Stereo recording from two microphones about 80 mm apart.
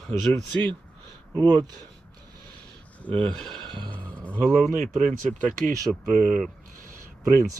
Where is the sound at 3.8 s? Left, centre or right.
Centre.